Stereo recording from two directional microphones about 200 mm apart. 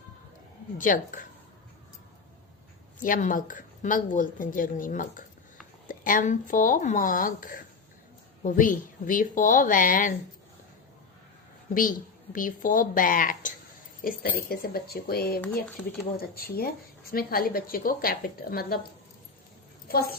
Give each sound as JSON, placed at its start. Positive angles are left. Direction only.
{"t": 0.8, "sound": "a woman's voice", "side_deg": 40}
{"t": 3.0, "sound": "a woman's voice", "side_deg": 40}
{"t": 11.7, "sound": "speech", "side_deg": 45}
{"t": 19.9, "sound": "speech", "side_deg": 50}